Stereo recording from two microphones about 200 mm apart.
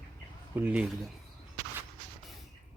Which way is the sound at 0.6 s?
10° right (ahead or behind).